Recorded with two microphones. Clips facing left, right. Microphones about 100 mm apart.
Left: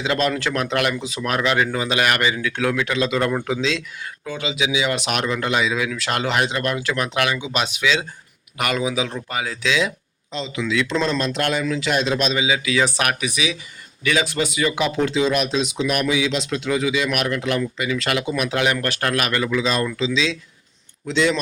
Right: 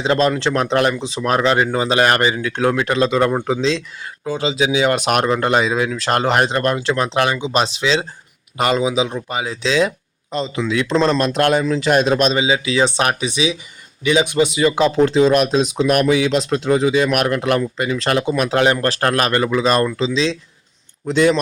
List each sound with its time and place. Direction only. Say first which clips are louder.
0.0 s speech: right 5 dB; 35° right (ahead or behind)
6.7 s speech: right 4 dB; 30° right (ahead or behind)
10.3 s speech: right 3 dB; 40° right (ahead or behind)
11.6 s speech: right 6 dB; 35° right (ahead or behind)
17.7 s speech: right 4 dB; 40° right (ahead or behind)